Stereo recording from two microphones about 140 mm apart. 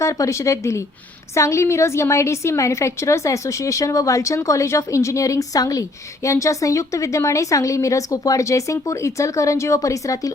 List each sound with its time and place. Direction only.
0.0 s a woman's voice: 20° left (ahead or behind)